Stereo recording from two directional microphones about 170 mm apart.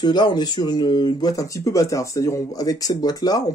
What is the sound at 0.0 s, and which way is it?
Speech, 25° left (ahead or behind).